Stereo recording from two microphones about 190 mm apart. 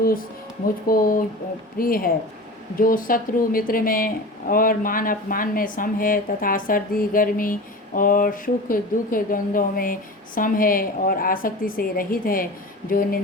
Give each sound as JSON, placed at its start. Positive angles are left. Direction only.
{"t": 0.9, "sound": "speech", "side_deg": 50}